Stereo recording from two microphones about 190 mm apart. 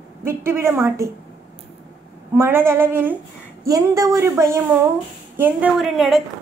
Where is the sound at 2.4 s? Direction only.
10° right (ahead or behind).